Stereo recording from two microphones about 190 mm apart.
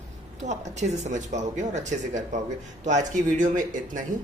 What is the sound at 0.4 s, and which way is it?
A man's voice, 35° right (ahead or behind).